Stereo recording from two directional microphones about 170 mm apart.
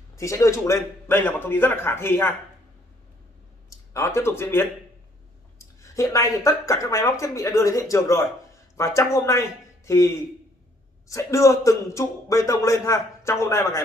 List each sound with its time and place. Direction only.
0.1 s a man's voice: 20° left (ahead or behind)
3.7 s speech: 15° left (ahead or behind)
5.8 s a man's voice: 20° left (ahead or behind)